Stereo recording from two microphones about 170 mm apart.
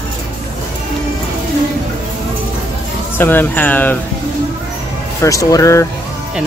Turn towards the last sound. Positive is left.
turn(degrees=20)  # may be behind; listen again after turning